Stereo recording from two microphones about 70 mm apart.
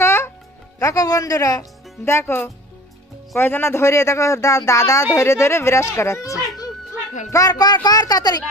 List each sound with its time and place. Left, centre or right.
0.0 s music: left
0.7 s speech: left
2.0 s speech: left